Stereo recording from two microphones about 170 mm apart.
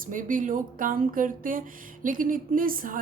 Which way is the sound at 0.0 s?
50° right (ahead or behind).